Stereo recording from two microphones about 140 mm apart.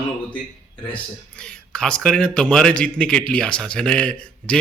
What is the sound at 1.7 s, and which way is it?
A man's voice, 5° left (ahead or behind).